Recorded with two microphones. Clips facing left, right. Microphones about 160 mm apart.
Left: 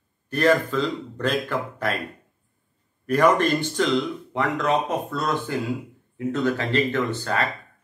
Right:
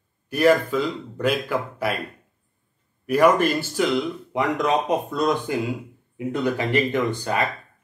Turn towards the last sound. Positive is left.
turn(degrees=-15)  # may be behind; listen again after turning